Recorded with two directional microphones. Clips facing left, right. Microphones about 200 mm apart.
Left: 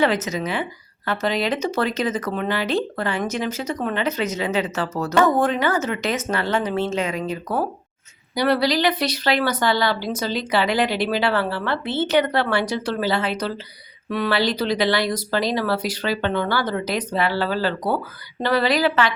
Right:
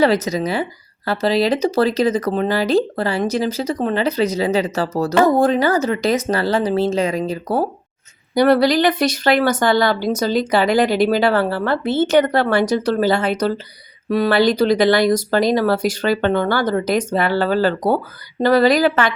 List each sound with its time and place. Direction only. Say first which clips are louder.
0.0 s speech: right 5 dB; 35° right (ahead or behind)
8.4 s speech: right 6 dB; 50° right (ahead or behind)